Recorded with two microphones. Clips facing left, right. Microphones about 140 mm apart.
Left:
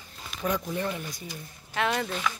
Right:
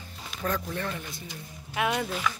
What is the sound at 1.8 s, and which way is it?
Speech, 10° right (ahead or behind).